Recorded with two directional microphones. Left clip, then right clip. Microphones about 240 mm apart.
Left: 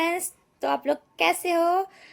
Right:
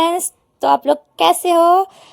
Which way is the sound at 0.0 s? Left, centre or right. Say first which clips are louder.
Right 9 dB; right.